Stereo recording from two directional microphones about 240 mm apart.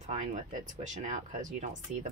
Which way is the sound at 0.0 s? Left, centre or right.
Right.